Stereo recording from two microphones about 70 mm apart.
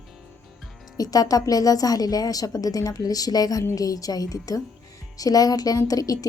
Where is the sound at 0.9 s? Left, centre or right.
Left.